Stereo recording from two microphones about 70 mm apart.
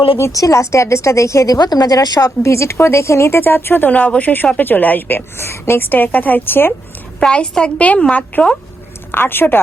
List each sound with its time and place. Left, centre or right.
0.3 s a woman's voice: left
1.5 s speech: left
2.4 s a woman's voice: left
7.2 s a woman's voice: centre
9.1 s speech: left